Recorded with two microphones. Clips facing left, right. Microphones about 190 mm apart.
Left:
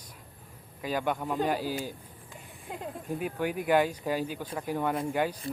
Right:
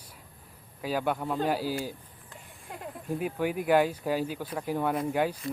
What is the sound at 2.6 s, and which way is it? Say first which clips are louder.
Speech: left 3 dB; 20° left (ahead or behind).